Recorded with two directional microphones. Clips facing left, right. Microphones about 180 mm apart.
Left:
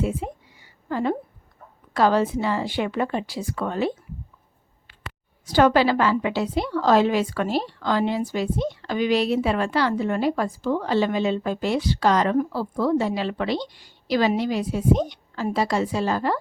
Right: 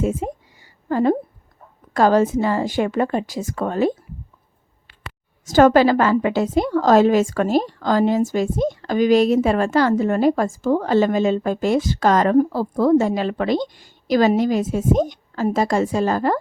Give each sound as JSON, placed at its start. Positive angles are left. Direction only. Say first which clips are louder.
{"t": 0.0, "sound": "a sound", "louder": "right 4 dB", "side_deg": -45}
{"t": 2.0, "sound": "a woman's voice", "louder": "right 4 dB", "side_deg": -45}
{"t": 5.5, "sound": "a woman's voice", "louder": "right 5 dB", "side_deg": -45}